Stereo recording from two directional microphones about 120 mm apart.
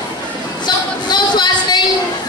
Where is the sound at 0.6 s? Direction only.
35° left (ahead or behind).